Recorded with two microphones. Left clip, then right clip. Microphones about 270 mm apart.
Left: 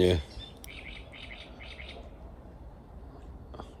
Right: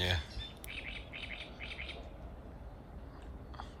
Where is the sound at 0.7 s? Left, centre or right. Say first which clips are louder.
Right 3 dB; right.